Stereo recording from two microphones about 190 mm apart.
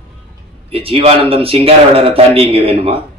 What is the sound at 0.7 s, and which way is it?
A man's voice, 30° right (ahead or behind).